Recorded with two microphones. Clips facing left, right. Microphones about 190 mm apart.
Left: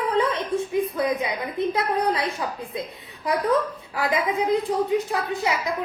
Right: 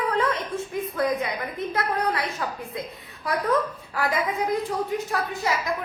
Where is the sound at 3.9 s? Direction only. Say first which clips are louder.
Left 2 dB; 15° left (ahead or behind).